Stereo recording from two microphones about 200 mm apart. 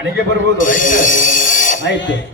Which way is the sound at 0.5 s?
40° left (ahead or behind).